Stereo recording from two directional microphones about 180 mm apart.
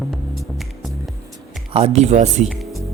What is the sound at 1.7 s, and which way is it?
Speech, 35° right (ahead or behind).